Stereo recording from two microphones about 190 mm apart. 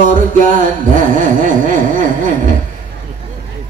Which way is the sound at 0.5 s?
45° right (ahead or behind).